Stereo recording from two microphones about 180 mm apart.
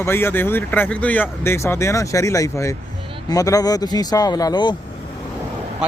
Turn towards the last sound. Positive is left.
turn(degrees=-5)  # may be behind; listen again after turning